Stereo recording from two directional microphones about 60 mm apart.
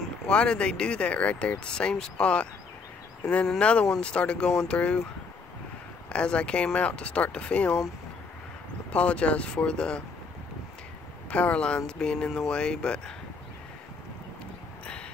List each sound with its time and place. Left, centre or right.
0.3 s speech: centre
3.5 s speech: centre
4.5 s speech: centre
6.0 s speech: centre
8.9 s speech: centre
11.2 s speech: left